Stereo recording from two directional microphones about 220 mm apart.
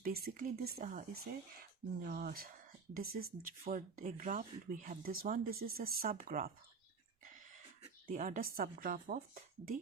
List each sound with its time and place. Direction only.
0.0 s speech: 45° right (ahead or behind)
0.8 s speech: 35° right (ahead or behind)
8.0 s speech: 35° right (ahead or behind)